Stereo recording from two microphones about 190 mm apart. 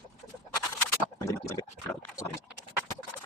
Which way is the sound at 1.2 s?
15° left (ahead or behind).